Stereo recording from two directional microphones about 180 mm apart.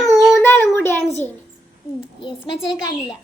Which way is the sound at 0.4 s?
10° left (ahead or behind).